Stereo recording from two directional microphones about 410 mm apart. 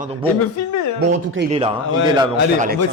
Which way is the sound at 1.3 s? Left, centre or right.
Centre.